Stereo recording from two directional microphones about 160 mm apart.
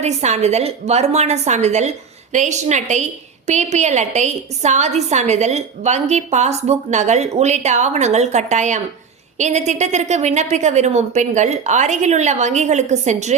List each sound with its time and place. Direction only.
0.0 s a woman's voice: 45° right (ahead or behind)